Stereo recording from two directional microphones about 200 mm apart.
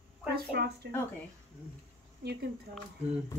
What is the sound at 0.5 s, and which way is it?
Speech, 55° right (ahead or behind).